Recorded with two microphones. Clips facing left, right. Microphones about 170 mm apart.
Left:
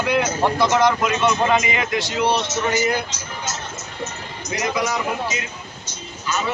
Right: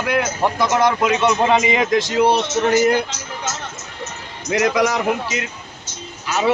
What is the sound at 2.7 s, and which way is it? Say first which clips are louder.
Speech: right 6 dB; 60° right (ahead or behind).